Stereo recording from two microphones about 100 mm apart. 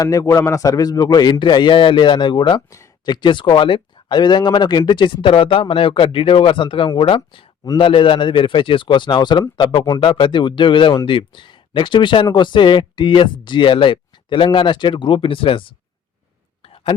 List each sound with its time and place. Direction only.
0.0 s a man's voice: 35° left (ahead or behind); by 15.7 s 60° left (ahead or behind)